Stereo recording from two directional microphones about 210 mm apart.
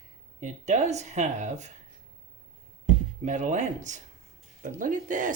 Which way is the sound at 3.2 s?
35° right (ahead or behind).